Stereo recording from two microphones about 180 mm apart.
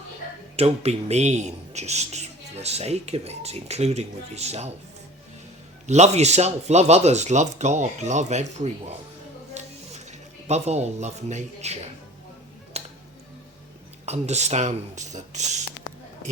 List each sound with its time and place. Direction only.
0.5 s speech: 35° right (ahead or behind)
5.8 s speech: 40° right (ahead or behind)
9.6 s music: 40° right (ahead or behind)
14.0 s speech: 40° right (ahead or behind)